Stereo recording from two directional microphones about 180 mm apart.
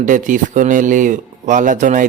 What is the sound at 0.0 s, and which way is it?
Speech, 45° right (ahead or behind).